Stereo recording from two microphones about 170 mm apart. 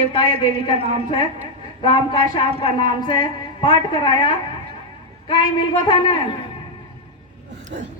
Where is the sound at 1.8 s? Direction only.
30° left (ahead or behind).